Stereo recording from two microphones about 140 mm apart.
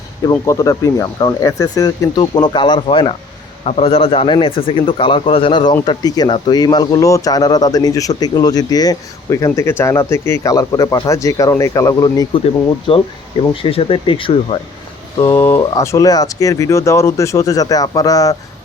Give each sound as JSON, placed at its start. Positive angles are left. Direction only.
{"t": 0.3, "sound": "speech", "side_deg": 25}
{"t": 3.6, "sound": "speech", "side_deg": 50}
{"t": 15.2, "sound": "speech", "side_deg": 20}